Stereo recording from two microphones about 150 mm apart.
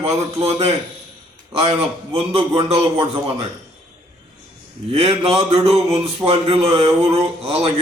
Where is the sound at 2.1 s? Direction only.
40° right (ahead or behind).